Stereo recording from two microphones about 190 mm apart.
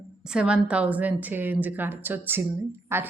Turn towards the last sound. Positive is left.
turn(degrees=-10)  # may be behind; listen again after turning